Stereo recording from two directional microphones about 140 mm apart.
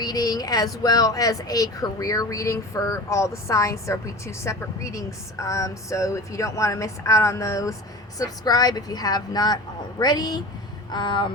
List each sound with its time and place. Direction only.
0.0 s speech: 25° left (ahead or behind)